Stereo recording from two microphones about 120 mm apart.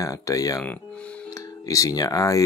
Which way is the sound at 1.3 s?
25° left (ahead or behind).